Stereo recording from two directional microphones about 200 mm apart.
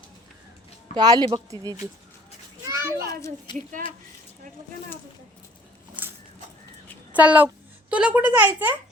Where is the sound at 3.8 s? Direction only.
45° right (ahead or behind).